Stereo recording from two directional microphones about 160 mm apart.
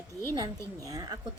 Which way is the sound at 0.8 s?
20° right (ahead or behind).